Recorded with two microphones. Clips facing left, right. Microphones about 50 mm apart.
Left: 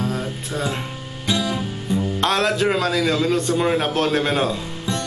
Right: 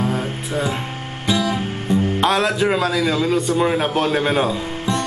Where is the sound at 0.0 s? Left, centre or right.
Right.